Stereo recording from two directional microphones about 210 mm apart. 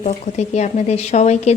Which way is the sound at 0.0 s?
35° left (ahead or behind).